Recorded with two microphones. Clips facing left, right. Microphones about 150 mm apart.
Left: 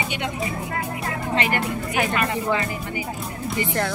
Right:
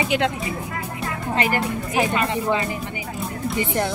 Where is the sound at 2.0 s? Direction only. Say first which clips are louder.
Right 2 dB; 20° right (ahead or behind).